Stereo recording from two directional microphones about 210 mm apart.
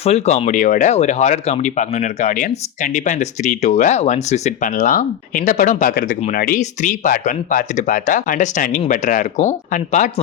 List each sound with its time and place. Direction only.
0.0 s speech: 30° left (ahead or behind)